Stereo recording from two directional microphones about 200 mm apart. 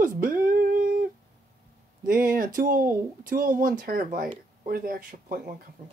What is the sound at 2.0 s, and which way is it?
Speech, 45° right (ahead or behind).